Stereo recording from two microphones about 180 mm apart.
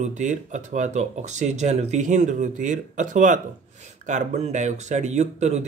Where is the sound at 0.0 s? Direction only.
40° right (ahead or behind).